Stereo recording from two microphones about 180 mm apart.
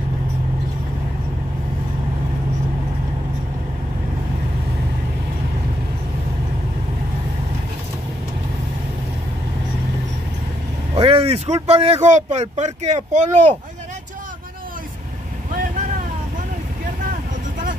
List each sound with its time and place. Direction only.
11.0 s speech: 30° right (ahead or behind)